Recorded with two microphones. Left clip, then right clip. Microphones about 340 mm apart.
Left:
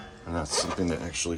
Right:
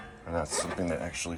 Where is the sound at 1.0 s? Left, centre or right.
Centre.